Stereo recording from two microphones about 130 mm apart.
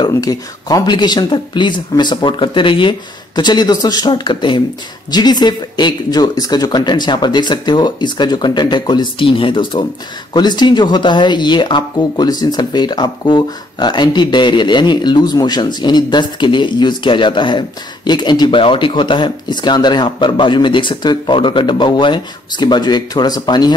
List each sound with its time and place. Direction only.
0.0 s speech: 30° left (ahead or behind)